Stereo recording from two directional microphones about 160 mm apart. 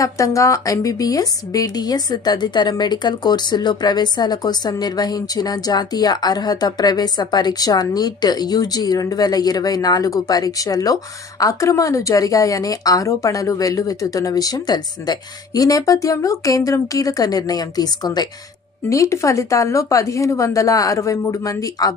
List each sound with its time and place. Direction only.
0.0 s a woman's voice: 20° left (ahead or behind)